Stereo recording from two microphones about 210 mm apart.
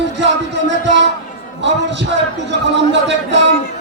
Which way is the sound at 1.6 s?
55° right (ahead or behind).